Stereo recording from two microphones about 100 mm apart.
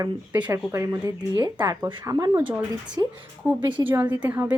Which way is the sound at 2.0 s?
35° right (ahead or behind).